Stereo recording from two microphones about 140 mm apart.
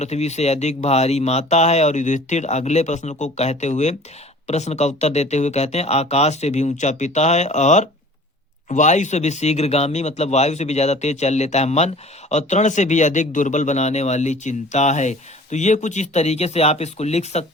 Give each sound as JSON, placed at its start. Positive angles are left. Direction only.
{"t": 0.0, "sound": "speech", "side_deg": 50}